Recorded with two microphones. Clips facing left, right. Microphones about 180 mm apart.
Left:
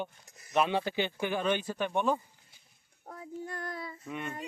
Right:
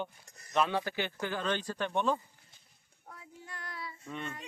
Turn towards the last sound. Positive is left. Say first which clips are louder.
# left 2 dB
turn(degrees=10)  # may be behind; listen again after turning